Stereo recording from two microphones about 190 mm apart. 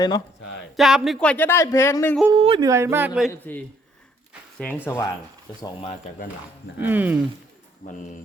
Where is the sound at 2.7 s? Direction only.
15° right (ahead or behind).